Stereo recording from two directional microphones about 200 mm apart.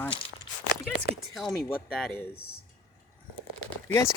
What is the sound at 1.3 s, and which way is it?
Speech, centre (ahead or behind).